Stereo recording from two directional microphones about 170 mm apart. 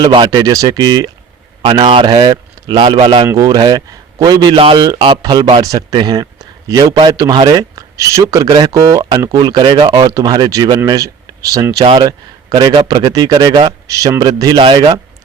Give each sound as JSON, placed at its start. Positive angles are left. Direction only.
{"t": 0.0, "sound": "a man's voice", "side_deg": -25}